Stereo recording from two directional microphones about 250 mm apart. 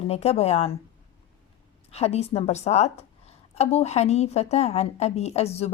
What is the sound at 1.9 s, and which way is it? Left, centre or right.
A woman's voice, left.